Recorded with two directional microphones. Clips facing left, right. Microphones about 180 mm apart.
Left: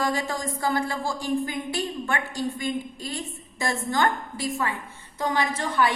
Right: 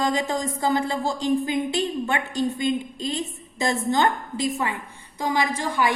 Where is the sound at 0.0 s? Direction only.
20° right (ahead or behind).